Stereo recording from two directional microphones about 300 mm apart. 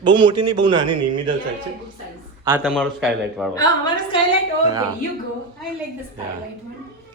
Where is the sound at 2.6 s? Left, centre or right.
Centre.